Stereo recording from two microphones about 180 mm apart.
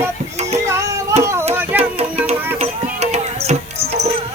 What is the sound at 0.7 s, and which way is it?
Music, 15° right (ahead or behind).